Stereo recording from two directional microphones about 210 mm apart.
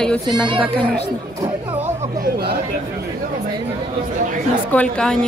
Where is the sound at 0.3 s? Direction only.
25° right (ahead or behind).